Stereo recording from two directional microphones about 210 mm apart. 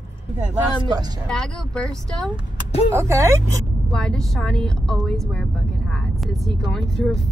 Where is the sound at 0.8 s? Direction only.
20° right (ahead or behind).